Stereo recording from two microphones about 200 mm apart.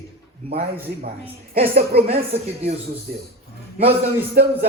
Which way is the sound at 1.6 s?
30° right (ahead or behind).